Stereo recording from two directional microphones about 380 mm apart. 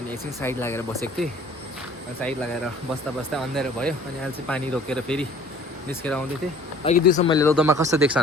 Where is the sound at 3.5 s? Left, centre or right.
Centre.